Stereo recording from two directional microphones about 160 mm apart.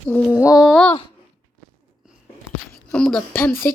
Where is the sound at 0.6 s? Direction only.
5° left (ahead or behind).